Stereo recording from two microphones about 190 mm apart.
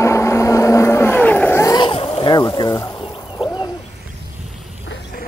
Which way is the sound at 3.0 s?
25° left (ahead or behind).